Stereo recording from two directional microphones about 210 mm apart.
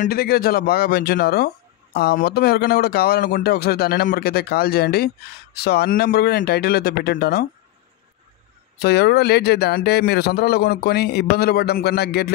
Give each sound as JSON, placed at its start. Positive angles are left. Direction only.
{"t": 0.0, "sound": "speech", "side_deg": 45}
{"t": 8.7, "sound": "speech", "side_deg": 50}